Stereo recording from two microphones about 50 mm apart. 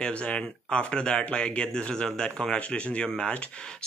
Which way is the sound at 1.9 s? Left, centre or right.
Centre.